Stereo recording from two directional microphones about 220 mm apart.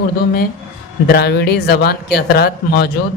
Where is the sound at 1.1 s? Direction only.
45° left (ahead or behind).